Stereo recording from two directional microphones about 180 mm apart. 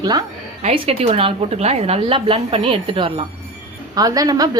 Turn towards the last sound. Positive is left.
turn(degrees=-20)  # may be behind; listen again after turning